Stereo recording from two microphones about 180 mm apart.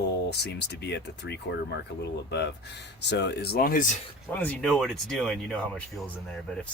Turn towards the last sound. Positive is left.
turn(degrees=0)  # may be behind; listen again after turning